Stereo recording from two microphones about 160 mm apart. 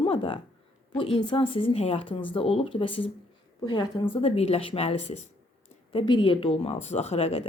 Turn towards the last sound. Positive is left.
turn(degrees=40)  # may be behind; listen again after turning